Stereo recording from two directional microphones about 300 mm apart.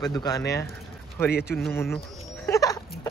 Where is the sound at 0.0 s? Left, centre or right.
Centre.